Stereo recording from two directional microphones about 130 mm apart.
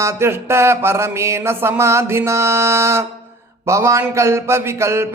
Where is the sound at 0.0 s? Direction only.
20° right (ahead or behind).